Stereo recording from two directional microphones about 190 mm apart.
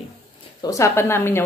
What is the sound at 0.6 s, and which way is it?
Speech, 15° left (ahead or behind).